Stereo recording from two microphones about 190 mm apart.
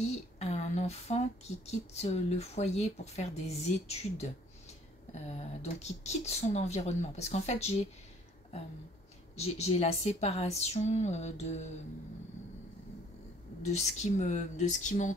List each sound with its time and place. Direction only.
0.4 s a sound: 35° left (ahead or behind)
1.7 s speech: 35° left (ahead or behind)
9.4 s speech: 35° left (ahead or behind)
13.7 s speech: 35° left (ahead or behind)